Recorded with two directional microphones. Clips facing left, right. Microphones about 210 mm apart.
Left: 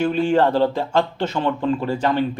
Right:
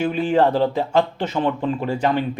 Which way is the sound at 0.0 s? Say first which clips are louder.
Left 1 dB; 10° right (ahead or behind).